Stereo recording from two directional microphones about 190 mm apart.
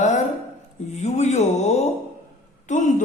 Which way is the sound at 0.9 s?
35° left (ahead or behind).